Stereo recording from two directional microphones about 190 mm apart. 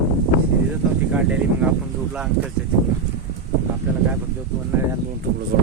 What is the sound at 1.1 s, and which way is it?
Speech, 5° right (ahead or behind).